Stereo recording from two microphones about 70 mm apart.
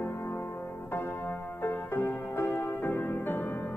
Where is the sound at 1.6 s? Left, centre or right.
Left.